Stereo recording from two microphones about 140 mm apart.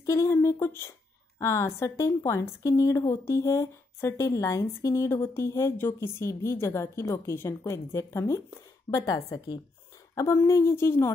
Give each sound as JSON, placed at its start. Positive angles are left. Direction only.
{"t": 0.0, "sound": "a woman's voice", "side_deg": 20}